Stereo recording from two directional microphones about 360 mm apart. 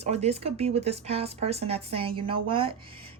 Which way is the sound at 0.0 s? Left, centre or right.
Centre.